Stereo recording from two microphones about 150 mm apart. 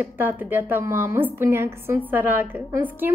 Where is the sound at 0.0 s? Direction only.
15° right (ahead or behind).